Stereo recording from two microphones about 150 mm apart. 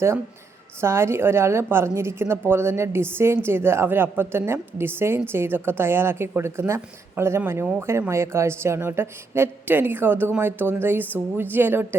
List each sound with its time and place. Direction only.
0.8 s a woman's voice: 15° right (ahead or behind)